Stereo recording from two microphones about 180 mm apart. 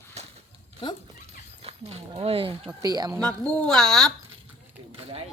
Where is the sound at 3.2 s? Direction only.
5° left (ahead or behind).